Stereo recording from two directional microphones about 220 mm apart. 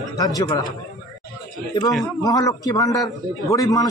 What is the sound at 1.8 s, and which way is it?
A man's voice, 20° left (ahead or behind).